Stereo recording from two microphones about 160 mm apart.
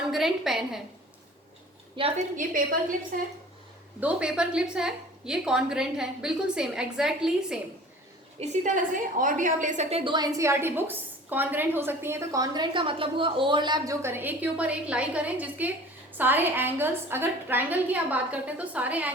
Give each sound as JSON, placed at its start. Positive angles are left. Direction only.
{"t": 0.1, "sound": "a woman's voice", "side_deg": 0}
{"t": 2.0, "sound": "a woman's voice", "side_deg": -30}
{"t": 2.3, "sound": "a woman's voice", "side_deg": -55}
{"t": 4.0, "sound": "a woman's voice", "side_deg": -5}
{"t": 8.4, "sound": "a woman's voice", "side_deg": -50}
{"t": 10.0, "sound": "a woman's voice", "side_deg": -30}